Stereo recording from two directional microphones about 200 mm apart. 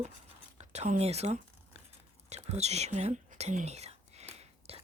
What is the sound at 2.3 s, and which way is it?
Whispering, 35° right (ahead or behind).